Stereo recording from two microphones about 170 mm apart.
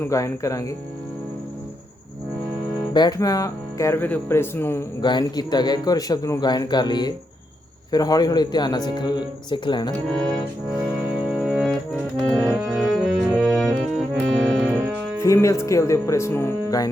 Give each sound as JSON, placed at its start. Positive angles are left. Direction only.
{"t": 0.0, "sound": "a man's voice", "side_deg": 20}
{"t": 2.9, "sound": "a man's voice", "side_deg": 25}
{"t": 11.3, "sound": "music", "side_deg": 0}
{"t": 12.2, "sound": "organ", "side_deg": 5}
{"t": 15.2, "sound": "speech", "side_deg": 15}